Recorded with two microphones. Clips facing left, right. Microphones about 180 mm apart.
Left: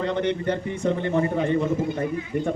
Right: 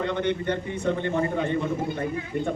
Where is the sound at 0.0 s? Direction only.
35° left (ahead or behind).